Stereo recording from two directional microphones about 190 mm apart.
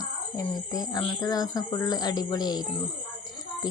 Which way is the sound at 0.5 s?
20° left (ahead or behind).